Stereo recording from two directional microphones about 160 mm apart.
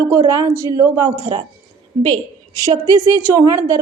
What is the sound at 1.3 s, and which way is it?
Speech, 30° right (ahead or behind).